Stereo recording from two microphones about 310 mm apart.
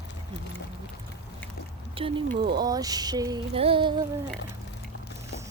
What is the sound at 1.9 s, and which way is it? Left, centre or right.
Speech, centre.